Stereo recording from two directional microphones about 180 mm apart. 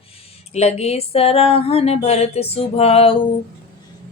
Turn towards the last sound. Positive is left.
turn(degrees=30)  # may be behind; listen again after turning